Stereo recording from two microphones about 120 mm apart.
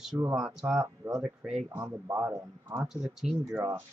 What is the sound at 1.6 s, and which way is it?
Speech, 20° right (ahead or behind).